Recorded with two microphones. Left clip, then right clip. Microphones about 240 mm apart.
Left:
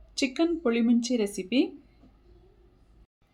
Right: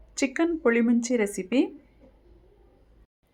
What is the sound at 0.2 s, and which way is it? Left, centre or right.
Speech, centre.